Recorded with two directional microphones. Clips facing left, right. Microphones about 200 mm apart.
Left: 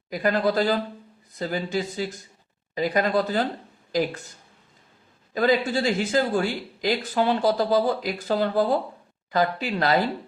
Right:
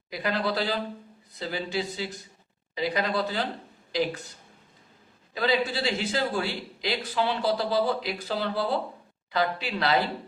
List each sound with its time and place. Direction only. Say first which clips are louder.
0.1 s a man's voice: left 6 dB; 45° left (ahead or behind)
5.3 s a man's voice: left 5 dB; 45° left (ahead or behind)